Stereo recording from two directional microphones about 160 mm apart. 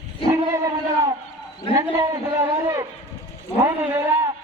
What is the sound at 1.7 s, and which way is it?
A man's voice, 20° right (ahead or behind).